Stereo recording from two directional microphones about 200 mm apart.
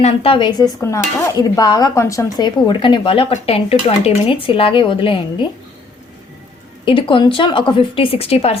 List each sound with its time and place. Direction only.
0.0 s dishes: 30° left (ahead or behind)
6.8 s dishes: 25° left (ahead or behind)